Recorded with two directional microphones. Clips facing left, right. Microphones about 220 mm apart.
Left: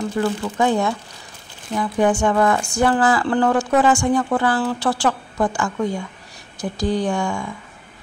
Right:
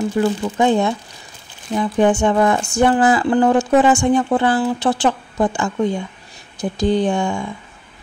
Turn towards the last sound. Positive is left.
turn(degrees=-25)  # may be behind; listen again after turning